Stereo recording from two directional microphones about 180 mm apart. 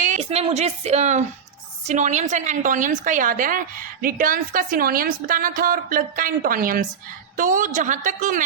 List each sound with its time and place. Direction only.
0.0 s a woman's voice: 40° right (ahead or behind)